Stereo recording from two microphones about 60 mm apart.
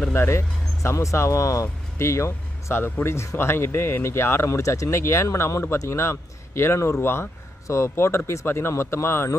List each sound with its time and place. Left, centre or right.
0.1 s speech: left